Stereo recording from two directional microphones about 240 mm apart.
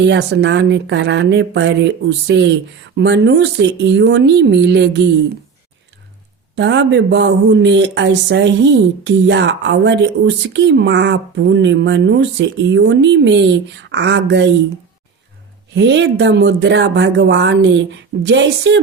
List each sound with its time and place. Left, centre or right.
0.0 s speech: right
6.6 s speech: right
15.7 s speech: right